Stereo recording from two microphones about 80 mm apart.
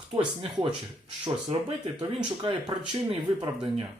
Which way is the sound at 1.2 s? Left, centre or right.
Right.